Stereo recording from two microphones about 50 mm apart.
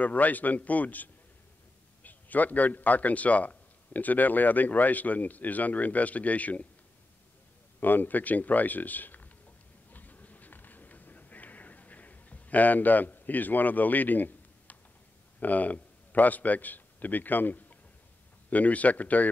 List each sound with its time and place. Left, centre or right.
0.0 s a man's voice: left
7.8 s a man's voice: left
9.9 s a sound: left
15.4 s a man's voice: left